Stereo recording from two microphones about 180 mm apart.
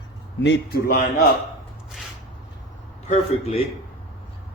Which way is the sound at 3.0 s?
35° left (ahead or behind).